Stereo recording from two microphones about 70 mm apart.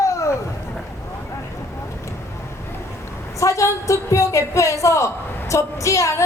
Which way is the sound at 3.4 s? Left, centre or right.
Left.